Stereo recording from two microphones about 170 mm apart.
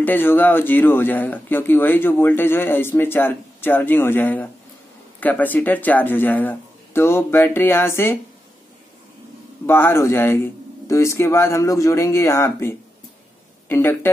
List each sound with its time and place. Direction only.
0.0 s speech: 10° left (ahead or behind)
9.7 s speech: 15° left (ahead or behind)